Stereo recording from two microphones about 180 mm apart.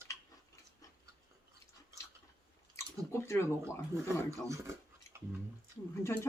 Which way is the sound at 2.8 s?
15° left (ahead or behind).